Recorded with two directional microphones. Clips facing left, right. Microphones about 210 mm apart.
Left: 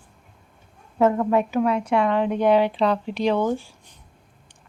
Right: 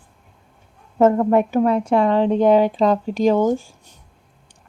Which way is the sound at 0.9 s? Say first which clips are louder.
Right 4 dB; 45° right (ahead or behind).